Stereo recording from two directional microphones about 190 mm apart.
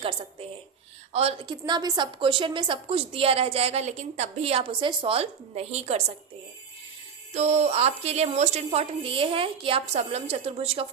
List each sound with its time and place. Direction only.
0.0 s a woman's voice: 30° right (ahead or behind)
7.3 s a woman's voice: 35° right (ahead or behind)